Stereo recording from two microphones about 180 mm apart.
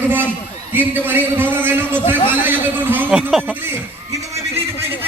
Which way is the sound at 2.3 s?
10° right (ahead or behind).